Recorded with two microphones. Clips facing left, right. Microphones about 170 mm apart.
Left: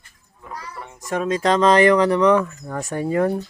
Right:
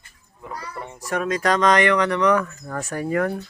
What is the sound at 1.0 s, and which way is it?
Speech, 25° left (ahead or behind).